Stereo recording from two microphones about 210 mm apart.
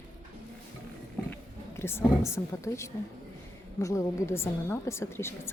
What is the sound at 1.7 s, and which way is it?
Speech, 10° left (ahead or behind).